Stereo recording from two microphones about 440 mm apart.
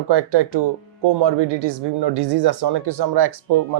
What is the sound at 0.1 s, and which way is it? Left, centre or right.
Speech, right.